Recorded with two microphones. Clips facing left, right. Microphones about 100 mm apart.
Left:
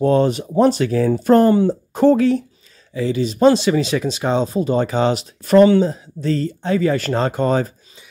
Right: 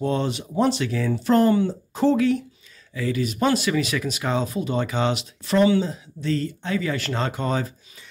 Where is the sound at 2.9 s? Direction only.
25° left (ahead or behind).